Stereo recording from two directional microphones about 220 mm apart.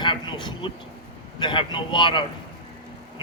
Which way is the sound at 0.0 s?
20° left (ahead or behind).